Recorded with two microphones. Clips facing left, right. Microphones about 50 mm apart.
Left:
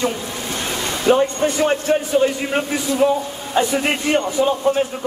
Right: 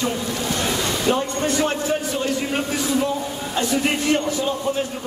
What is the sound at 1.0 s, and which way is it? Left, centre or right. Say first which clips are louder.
A man's voice: left 8 dB; left.